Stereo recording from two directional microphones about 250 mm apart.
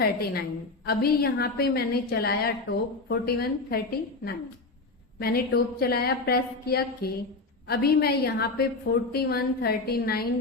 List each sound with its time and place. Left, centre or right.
0.0 s a woman's voice: left
5.2 s a woman's voice: left